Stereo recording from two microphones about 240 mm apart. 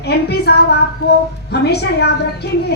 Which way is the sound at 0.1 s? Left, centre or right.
Left.